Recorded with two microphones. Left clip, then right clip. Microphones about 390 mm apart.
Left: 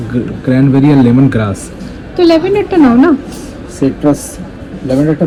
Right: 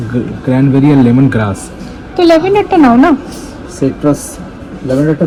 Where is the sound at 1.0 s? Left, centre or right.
Centre.